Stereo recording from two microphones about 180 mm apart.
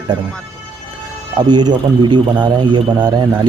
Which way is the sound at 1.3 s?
25° right (ahead or behind).